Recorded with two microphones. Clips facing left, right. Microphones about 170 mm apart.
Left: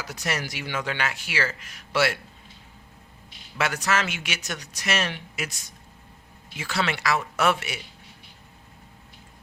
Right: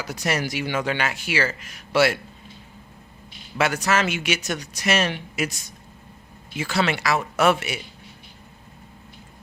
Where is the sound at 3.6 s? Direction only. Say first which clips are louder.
Right 4 dB; 20° right (ahead or behind).